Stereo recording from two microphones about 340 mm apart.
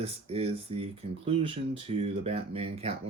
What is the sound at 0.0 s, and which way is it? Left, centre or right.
Speech, centre.